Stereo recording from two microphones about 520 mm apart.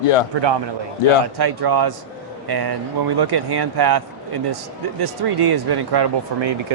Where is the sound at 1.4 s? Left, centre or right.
Right.